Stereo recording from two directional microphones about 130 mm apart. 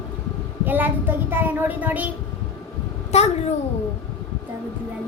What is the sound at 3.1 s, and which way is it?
Speech, 55° left (ahead or behind).